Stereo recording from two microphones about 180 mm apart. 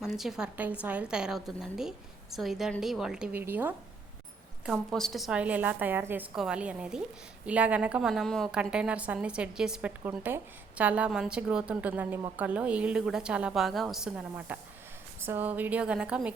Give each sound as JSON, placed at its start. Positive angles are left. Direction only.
{"t": 0.0, "sound": "a woman's voice", "side_deg": 0}